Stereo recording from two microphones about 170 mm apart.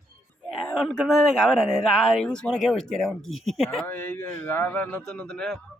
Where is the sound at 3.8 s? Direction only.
10° left (ahead or behind).